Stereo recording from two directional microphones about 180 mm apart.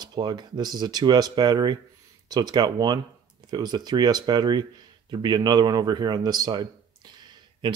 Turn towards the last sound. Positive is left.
turn(degrees=-25)  # may be behind; listen again after turning